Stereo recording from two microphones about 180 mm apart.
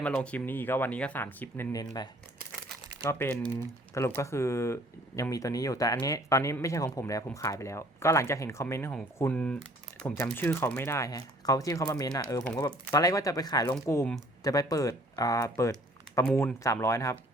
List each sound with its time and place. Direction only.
0.0 s speech: 5° left (ahead or behind); by 2.0 s 20° left (ahead or behind)
3.0 s speech: 10° left (ahead or behind)